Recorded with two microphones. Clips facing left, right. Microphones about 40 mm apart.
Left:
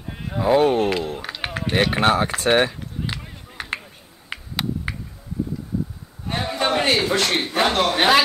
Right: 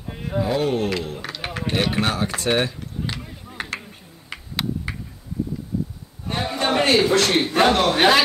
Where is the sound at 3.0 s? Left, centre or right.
Centre.